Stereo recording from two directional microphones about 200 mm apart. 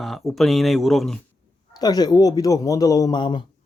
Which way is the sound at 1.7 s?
20° left (ahead or behind).